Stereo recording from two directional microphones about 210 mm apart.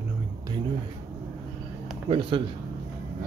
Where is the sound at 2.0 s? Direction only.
25° right (ahead or behind).